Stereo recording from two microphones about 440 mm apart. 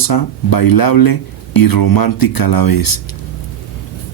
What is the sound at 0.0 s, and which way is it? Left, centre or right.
Speech, left.